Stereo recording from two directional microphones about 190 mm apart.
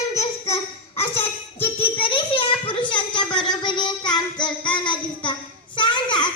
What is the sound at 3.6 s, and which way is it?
Child singing, 25° left (ahead or behind).